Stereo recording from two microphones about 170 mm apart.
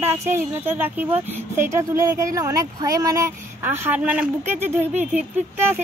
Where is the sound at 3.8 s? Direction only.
10° right (ahead or behind).